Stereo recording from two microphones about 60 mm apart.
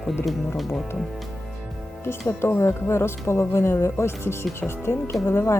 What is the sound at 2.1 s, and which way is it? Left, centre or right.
Speech, left.